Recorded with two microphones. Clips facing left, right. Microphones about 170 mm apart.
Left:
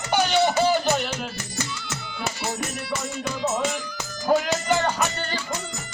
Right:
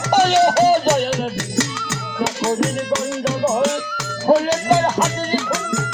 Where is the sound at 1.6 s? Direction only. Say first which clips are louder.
Right 10 dB; 80° right.